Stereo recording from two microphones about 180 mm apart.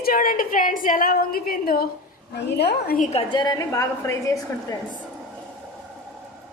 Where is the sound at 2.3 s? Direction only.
65° left (ahead or behind).